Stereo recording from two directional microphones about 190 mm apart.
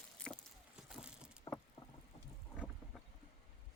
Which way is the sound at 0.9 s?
5° right (ahead or behind).